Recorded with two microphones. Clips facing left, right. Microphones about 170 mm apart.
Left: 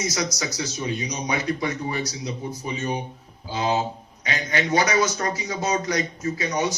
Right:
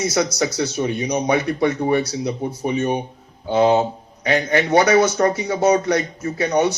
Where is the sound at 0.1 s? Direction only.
65° right (ahead or behind).